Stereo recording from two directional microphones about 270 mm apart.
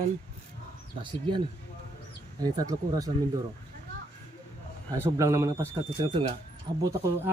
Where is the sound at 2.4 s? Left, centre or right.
Centre.